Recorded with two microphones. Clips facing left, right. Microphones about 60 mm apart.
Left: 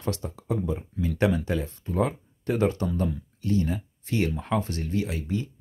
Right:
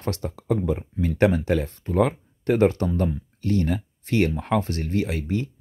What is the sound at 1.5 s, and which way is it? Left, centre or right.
Speech, right.